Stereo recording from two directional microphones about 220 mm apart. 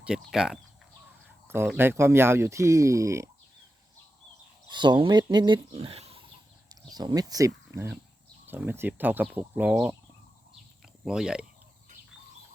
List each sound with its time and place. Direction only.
0.0 s speech: 5° right (ahead or behind)
4.7 s speech: 20° right (ahead or behind); by 11.4 s 5° right (ahead or behind)